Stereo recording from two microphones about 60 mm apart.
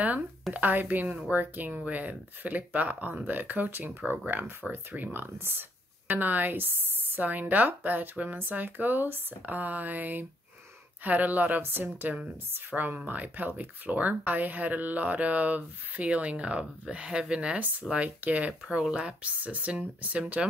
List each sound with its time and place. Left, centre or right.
0.0 s a woman's voice: right